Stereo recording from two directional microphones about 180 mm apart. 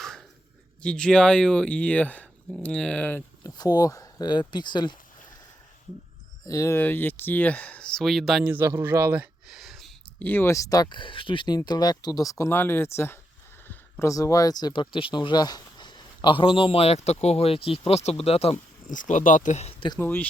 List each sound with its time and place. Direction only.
0.0 s a sound: centre (ahead or behind)
0.8 s speech: 5° left (ahead or behind); by 4.9 s 25° left (ahead or behind)
6.4 s speech: 15° left (ahead or behind); by 18.5 s 35° left (ahead or behind)
18.9 s speech: 45° left (ahead or behind)
20.0 s speech: 10° left (ahead or behind)